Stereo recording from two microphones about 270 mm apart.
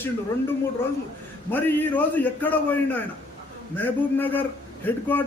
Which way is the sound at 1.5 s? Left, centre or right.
Centre.